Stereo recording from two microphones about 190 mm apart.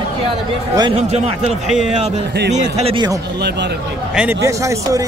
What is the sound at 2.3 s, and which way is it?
Speech, 60° right (ahead or behind).